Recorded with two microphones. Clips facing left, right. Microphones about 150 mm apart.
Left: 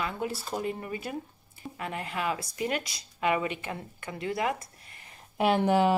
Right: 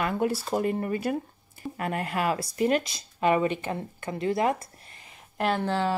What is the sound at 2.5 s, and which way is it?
Speech, 45° right (ahead or behind).